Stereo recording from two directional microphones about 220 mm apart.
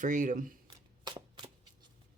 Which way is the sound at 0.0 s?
35° right (ahead or behind).